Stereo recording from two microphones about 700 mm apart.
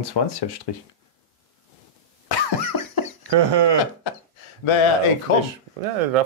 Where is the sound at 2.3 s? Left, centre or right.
Left.